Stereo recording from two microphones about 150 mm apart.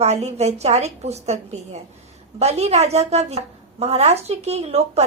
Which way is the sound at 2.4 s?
45° right (ahead or behind).